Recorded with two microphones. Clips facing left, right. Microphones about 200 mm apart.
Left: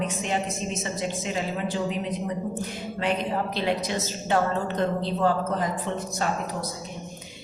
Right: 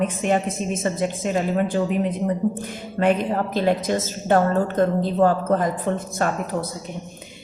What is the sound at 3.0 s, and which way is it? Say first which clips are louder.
A woman's voice: right 7 dB; 50° right (ahead or behind).